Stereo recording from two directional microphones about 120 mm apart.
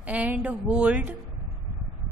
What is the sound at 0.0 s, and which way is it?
A woman's voice, 10° right (ahead or behind).